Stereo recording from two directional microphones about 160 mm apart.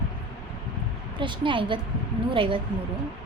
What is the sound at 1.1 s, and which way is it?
A woman's voice, 30° right (ahead or behind).